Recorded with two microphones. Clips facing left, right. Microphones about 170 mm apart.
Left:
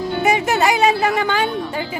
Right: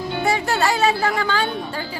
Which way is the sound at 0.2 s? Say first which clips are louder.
Left 3 dB; 20° left (ahead or behind).